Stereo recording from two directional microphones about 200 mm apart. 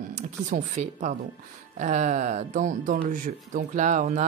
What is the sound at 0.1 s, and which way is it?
Speech, 35° right (ahead or behind).